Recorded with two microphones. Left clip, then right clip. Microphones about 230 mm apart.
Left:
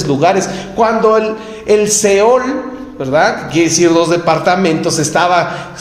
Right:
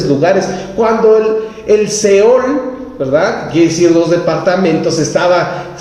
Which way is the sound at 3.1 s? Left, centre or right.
Left.